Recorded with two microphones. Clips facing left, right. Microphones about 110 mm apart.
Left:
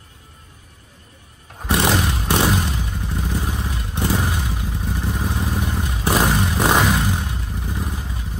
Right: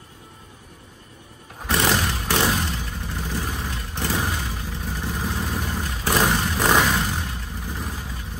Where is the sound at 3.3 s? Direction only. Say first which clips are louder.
Left 3 dB; 15° left (ahead or behind).